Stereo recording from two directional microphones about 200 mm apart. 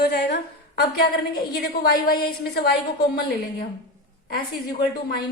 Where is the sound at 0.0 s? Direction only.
55° left (ahead or behind).